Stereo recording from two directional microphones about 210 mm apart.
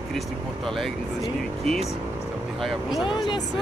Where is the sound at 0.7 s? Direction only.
Centre (ahead or behind).